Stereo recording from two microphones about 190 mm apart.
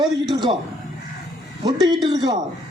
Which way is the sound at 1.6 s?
20° right (ahead or behind).